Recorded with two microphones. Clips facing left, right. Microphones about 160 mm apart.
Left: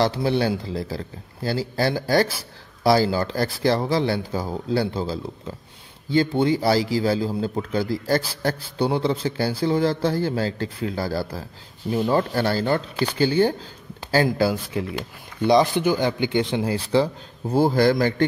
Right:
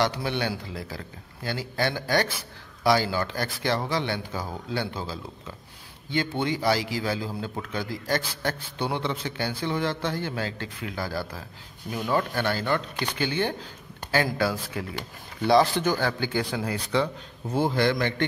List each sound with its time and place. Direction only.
0.0 s a man's voice: 35° left (ahead or behind)
15.4 s speech: 20° left (ahead or behind); by 18.2 s 35° left (ahead or behind)